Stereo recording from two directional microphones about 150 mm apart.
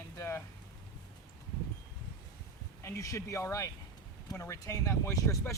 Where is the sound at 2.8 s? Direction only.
20° left (ahead or behind).